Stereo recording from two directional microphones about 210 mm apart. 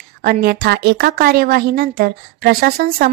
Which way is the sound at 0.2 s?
45° right (ahead or behind).